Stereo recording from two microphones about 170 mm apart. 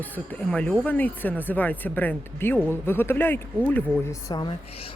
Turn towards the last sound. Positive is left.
turn(degrees=20)  # may be behind; listen again after turning